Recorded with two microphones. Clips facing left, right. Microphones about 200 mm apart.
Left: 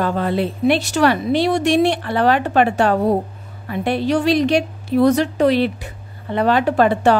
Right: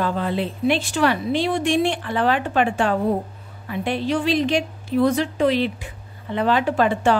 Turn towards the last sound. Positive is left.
turn(degrees=60)  # may be behind; listen again after turning